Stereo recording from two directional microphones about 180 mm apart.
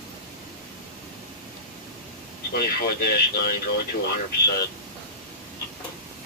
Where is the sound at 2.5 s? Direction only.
60° left (ahead or behind).